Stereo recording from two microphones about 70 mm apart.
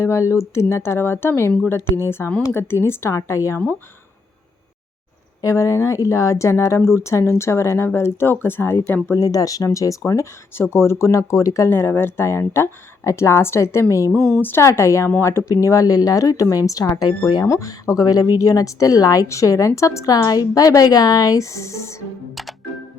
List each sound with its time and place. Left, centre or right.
0.0 s speech: left
5.4 s speech: left
9.0 s speech: left
10.0 s speech: left
11.7 s speech: left
14.1 s speech: centre
14.6 s speech: left
15.6 s speech: left
17.4 s speech: left
20.5 s speech: left